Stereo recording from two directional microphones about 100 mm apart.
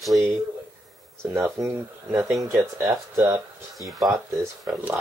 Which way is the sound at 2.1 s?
25° right (ahead or behind).